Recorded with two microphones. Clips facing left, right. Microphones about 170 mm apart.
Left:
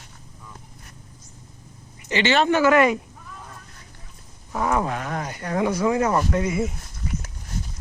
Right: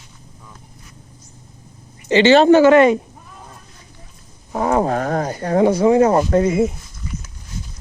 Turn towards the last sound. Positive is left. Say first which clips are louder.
# right 8 dB
turn(degrees=-30)  # may be behind; listen again after turning